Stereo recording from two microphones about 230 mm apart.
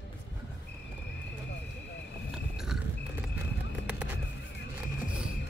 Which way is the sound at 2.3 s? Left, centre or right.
Centre.